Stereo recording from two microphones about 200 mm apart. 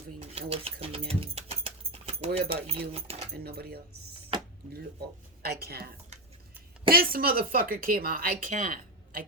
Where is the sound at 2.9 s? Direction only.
30° right (ahead or behind).